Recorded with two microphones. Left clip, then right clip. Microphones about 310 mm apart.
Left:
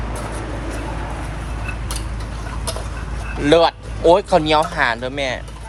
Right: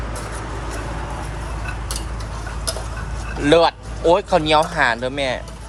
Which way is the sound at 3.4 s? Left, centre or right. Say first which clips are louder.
Left 1 dB; centre.